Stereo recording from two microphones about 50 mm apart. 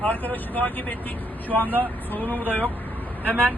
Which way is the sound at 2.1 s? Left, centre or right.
Left.